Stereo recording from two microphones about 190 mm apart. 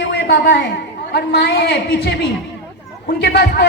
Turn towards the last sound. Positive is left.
turn(degrees=60)  # may be behind; listen again after turning